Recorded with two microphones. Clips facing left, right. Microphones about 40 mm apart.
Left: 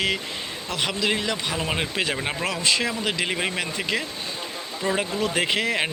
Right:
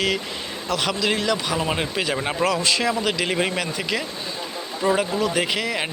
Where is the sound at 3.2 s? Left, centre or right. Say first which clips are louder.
Right 3 dB; centre.